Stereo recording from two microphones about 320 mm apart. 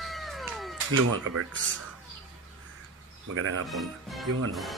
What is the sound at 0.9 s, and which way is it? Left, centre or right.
Speech, right.